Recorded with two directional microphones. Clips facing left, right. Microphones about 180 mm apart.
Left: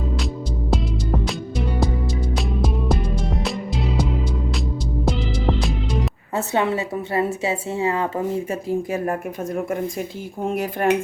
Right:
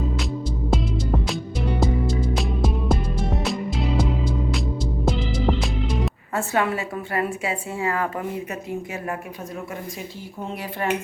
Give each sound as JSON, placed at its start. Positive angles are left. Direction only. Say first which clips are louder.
{"t": 0.7, "sound": "music", "louder": "even", "side_deg": 0}
{"t": 5.0, "sound": "music", "louder": "even", "side_deg": 0}
{"t": 6.3, "sound": "a woman's voice", "louder": "left 2 dB", "side_deg": 20}
{"t": 10.4, "sound": "speech", "louder": "left 7 dB", "side_deg": 50}